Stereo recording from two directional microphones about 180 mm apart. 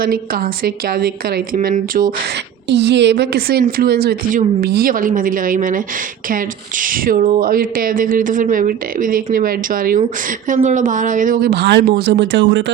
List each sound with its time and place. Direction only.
0.0 s a woman's voice: 55° right (ahead or behind)
2.6 s a woman's voice: 70° right (ahead or behind); by 12.7 s 85° right